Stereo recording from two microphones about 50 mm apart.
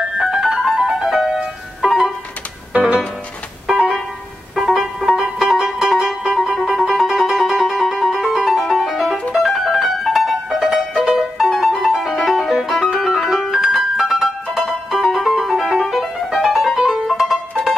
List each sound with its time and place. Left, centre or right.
0.2 s music: centre
2.7 s music: right
3.6 s music: centre